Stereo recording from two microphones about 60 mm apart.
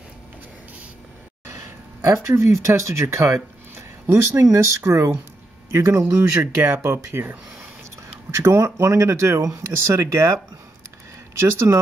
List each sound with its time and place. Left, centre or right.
2.0 s speech: right
11.5 s speech: right